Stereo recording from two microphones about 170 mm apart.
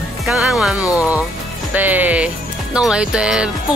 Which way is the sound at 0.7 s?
20° left (ahead or behind).